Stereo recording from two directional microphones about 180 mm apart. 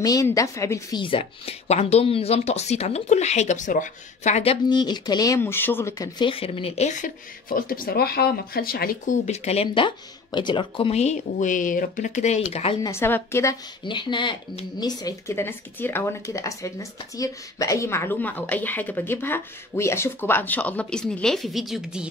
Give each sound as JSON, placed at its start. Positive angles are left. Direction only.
{"t": 0.0, "sound": "a woman's voice", "side_deg": 20}
{"t": 12.8, "sound": "speech", "side_deg": 15}
{"t": 13.8, "sound": "speech", "side_deg": 25}